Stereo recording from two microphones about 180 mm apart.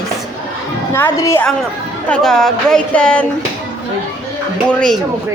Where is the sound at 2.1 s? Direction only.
5° left (ahead or behind).